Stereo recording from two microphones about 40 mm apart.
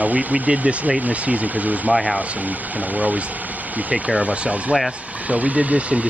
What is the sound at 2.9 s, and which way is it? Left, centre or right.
Speech, right.